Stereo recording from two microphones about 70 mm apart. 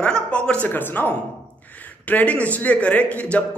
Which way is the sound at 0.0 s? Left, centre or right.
Centre.